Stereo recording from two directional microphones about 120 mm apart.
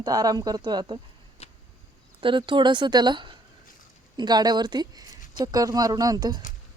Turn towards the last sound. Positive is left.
turn(degrees=-35)  # may be behind; listen again after turning